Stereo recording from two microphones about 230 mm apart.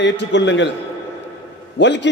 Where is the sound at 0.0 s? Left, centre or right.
Left.